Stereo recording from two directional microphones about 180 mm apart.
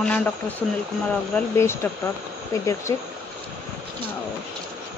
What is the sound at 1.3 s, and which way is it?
Speech, 15° left (ahead or behind).